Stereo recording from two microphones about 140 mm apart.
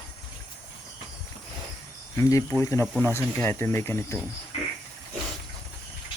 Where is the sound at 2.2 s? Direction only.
25° left (ahead or behind).